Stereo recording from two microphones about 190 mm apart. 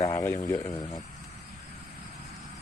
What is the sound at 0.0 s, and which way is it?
Speech, 20° left (ahead or behind).